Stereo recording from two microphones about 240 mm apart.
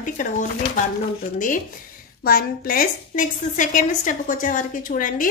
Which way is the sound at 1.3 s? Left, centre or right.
Left.